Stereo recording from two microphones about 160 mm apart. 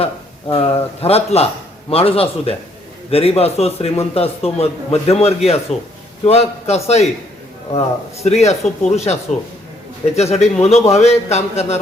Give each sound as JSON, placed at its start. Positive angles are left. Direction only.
{"t": 0.4, "sound": "a man's voice", "side_deg": 35}
{"t": 10.2, "sound": "a man's voice", "side_deg": 40}